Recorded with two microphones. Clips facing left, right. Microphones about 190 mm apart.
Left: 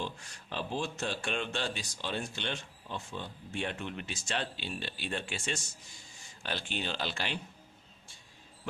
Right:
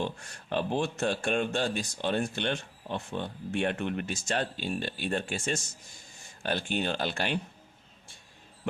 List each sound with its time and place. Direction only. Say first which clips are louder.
0.0 s speech: right 6 dB; 55° right (ahead or behind)